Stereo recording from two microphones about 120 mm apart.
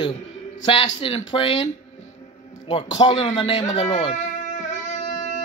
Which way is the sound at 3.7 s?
45° left (ahead or behind).